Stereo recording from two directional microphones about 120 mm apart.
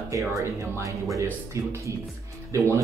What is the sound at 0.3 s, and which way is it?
Speech, 25° right (ahead or behind).